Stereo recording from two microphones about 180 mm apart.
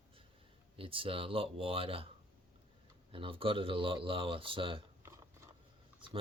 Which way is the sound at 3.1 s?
30° right (ahead or behind).